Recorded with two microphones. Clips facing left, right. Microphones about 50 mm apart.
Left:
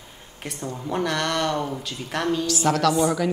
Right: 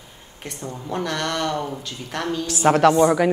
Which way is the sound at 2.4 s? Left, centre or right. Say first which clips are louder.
Right 8 dB; right.